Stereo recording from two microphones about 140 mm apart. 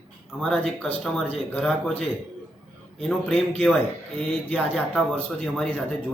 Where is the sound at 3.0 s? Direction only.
5° left (ahead or behind).